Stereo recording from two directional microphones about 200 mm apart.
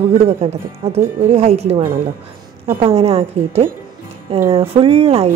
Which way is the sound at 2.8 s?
30° right (ahead or behind).